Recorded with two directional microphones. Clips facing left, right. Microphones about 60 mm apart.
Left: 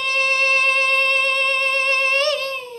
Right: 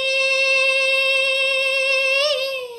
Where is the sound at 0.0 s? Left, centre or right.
Left.